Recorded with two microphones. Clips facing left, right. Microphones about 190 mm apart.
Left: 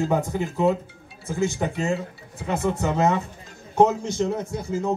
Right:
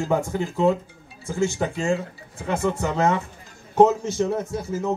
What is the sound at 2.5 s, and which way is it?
A man's voice, 20° left (ahead or behind).